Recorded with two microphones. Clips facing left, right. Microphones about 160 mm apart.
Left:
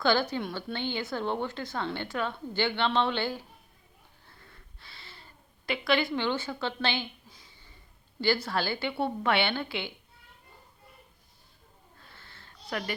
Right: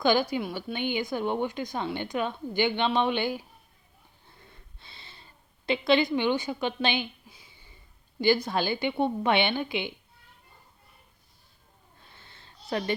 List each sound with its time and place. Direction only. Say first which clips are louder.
0.0 s a woman's voice: right 2 dB; 15° right (ahead or behind)
4.3 s snort: right 2 dB; 20° right (ahead or behind)
5.6 s a woman's voice: right 4 dB; 20° right (ahead or behind)
12.0 s a sound: even; 20° right (ahead or behind)